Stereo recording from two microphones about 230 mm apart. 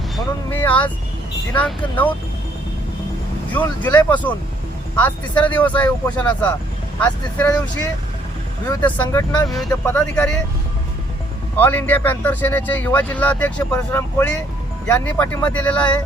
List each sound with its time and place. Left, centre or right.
0.2 s speech: centre
3.5 s speech: centre
8.6 s speech: centre
11.5 s speech: centre